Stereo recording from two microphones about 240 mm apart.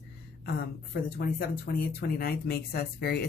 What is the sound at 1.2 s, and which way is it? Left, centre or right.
Speech, left.